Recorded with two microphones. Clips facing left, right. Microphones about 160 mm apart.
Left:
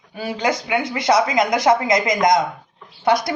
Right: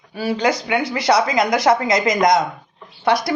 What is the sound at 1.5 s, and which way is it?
Speech, 30° right (ahead or behind).